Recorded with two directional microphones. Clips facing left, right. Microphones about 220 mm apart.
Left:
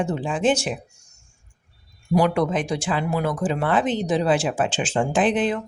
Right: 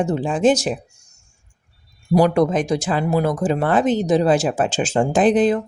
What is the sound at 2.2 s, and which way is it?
Speech, 40° right (ahead or behind).